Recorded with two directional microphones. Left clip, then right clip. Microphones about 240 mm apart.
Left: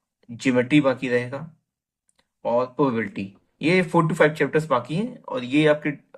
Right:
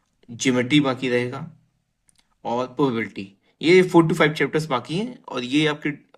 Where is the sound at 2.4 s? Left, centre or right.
Right.